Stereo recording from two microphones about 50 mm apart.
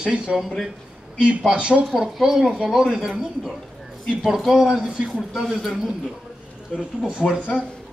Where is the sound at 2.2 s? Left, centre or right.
Centre.